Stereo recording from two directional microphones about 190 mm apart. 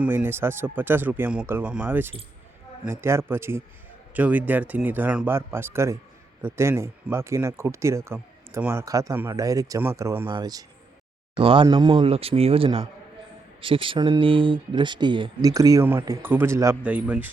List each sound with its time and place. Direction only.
0.0 s speech: 10° right (ahead or behind)